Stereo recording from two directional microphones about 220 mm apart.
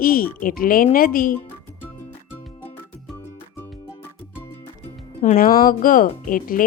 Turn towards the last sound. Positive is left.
turn(degrees=40)  # may be behind; listen again after turning